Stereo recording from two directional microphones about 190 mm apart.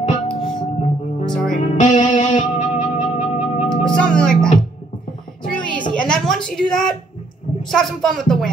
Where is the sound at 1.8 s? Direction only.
40° left (ahead or behind).